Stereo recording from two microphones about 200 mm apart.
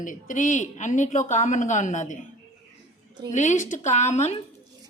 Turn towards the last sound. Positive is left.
turn(degrees=35)  # may be behind; listen again after turning